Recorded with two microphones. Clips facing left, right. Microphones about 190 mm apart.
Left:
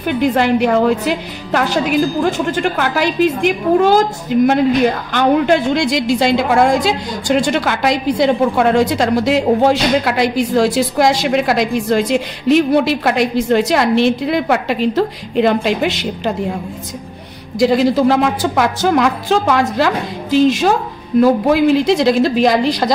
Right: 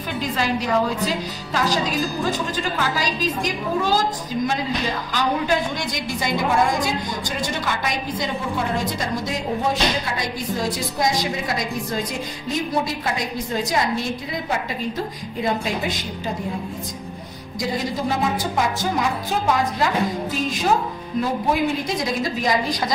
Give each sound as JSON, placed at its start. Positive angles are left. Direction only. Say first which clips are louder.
{"t": 0.0, "sound": "a woman's voice", "louder": "left 10 dB", "side_deg": 65}
{"t": 17.6, "sound": "a woman's voice", "louder": "left 13 dB", "side_deg": 75}